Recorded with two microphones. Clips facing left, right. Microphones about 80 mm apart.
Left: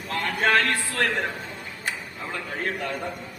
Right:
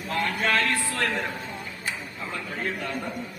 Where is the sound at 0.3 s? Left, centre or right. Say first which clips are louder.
Left 5 dB; left.